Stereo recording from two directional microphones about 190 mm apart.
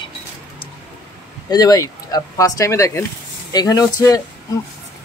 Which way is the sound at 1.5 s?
20° left (ahead or behind).